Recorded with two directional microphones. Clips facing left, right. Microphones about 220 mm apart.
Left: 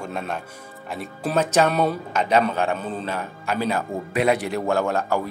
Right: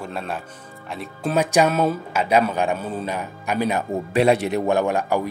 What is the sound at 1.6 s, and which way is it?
Speech, centre (ahead or behind).